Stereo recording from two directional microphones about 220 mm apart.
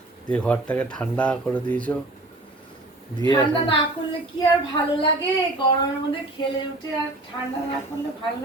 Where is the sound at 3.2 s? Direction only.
20° left (ahead or behind).